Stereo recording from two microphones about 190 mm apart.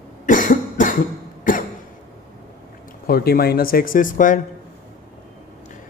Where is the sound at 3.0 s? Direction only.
55° left (ahead or behind).